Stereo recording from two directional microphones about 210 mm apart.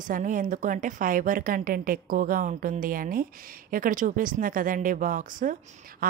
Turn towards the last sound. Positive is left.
turn(degrees=-45)  # may be behind; listen again after turning